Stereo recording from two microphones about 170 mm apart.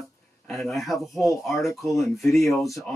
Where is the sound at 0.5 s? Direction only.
Centre (ahead or behind).